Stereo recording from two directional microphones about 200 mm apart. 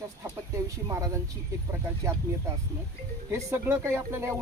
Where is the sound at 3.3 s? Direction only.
15° right (ahead or behind).